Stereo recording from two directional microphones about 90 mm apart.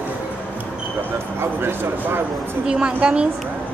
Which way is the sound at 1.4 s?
25° right (ahead or behind).